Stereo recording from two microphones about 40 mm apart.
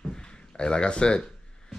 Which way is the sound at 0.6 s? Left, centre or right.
Left.